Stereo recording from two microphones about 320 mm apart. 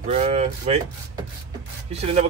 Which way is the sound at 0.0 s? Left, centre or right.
Right.